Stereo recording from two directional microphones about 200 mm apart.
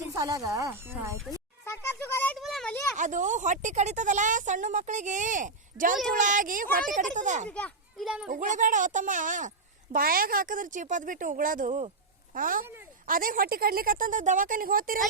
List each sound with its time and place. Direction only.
0.1 s speech: 15° right (ahead or behind)
1.6 s a sound: 10° left (ahead or behind)
2.9 s speech: 40° right (ahead or behind)
7.4 s a child's voice: 5° left (ahead or behind)
8.3 s a woman's voice: 40° right (ahead or behind)